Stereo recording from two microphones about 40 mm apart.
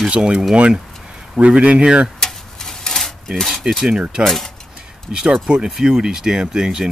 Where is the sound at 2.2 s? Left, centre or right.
Centre.